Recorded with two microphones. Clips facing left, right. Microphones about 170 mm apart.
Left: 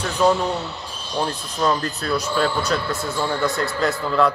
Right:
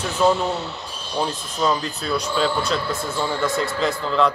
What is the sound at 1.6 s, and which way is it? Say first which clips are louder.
A man's voice: left 1 dB; centre (ahead or behind).